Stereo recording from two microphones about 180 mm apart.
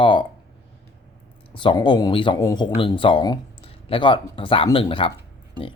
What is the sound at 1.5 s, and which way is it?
Speech, 25° left (ahead or behind).